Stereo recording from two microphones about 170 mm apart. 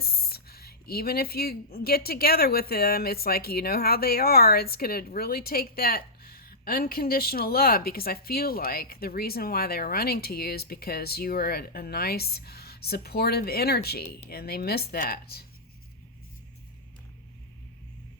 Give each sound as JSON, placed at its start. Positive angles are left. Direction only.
{"t": 0.0, "sound": "speech", "side_deg": 65}
{"t": 14.9, "sound": "speech", "side_deg": 55}